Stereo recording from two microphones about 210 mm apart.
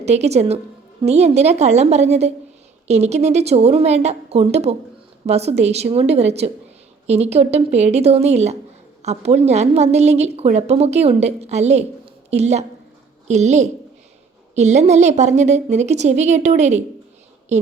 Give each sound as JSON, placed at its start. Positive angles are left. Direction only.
{"t": 0.0, "sound": "a woman's voice", "side_deg": -30}